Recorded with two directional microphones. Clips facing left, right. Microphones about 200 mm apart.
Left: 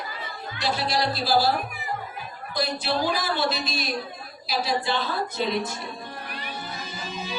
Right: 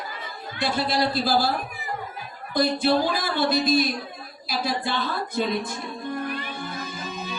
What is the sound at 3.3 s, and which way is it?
Speech, 50° right (ahead or behind).